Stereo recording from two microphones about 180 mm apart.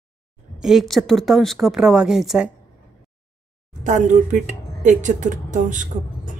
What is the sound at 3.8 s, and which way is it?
Speech, 45° right (ahead or behind).